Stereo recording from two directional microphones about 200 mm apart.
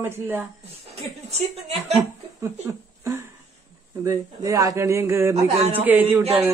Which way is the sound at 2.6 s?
15° right (ahead or behind).